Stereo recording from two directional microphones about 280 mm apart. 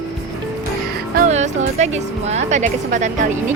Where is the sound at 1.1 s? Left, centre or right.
Right.